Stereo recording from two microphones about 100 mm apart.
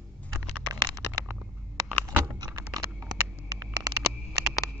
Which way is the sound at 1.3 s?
15° right (ahead or behind).